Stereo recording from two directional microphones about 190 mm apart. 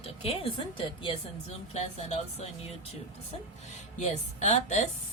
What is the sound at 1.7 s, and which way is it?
Speech, 35° left (ahead or behind).